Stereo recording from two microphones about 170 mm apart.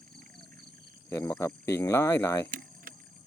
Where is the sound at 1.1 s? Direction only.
15° left (ahead or behind).